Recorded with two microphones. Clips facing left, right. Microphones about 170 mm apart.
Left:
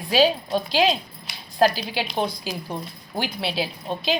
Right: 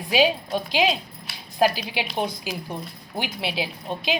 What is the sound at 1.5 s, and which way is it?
A woman's voice, 15° right (ahead or behind).